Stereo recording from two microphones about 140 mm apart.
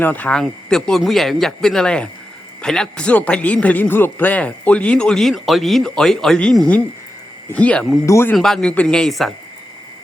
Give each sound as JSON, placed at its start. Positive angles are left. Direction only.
{"t": 0.0, "sound": "speech", "side_deg": 10}
{"t": 8.0, "sound": "speech", "side_deg": 20}
{"t": 8.4, "sound": "speech", "side_deg": 5}